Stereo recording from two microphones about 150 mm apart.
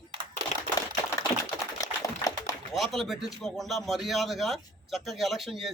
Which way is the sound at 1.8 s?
25° left (ahead or behind).